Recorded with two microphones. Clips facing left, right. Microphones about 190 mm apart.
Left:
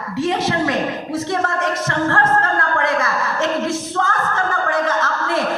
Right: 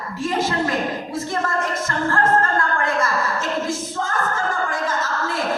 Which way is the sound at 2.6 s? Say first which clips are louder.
Left 2 dB; 70° left (ahead or behind).